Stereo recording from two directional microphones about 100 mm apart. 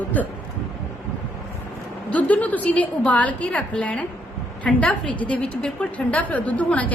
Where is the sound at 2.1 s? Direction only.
15° left (ahead or behind).